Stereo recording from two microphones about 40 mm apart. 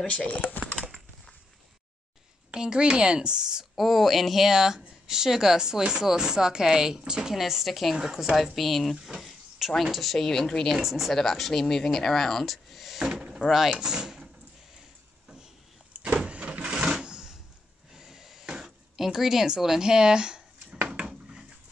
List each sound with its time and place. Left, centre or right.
0.0 s speech: left
2.5 s a woman's voice: right
3.7 s speech: centre
7.3 s speech: centre
8.5 s speech: centre
9.0 s speech: centre
10.7 s speech: centre
13.1 s a sound: centre
13.5 s speech: centre
15.9 s vehicle: right
16.3 s a sound: right
16.8 s sewing machine: right
17.9 s a sound: centre